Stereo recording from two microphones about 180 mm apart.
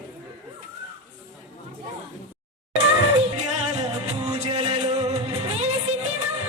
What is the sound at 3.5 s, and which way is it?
Music, 40° right (ahead or behind).